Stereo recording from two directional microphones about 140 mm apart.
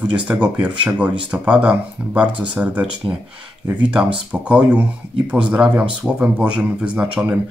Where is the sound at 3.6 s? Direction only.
10° right (ahead or behind).